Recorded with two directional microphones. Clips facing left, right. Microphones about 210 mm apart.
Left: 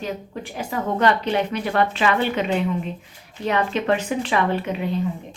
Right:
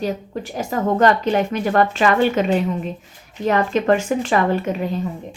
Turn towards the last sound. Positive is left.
turn(degrees=-45)  # may be behind; listen again after turning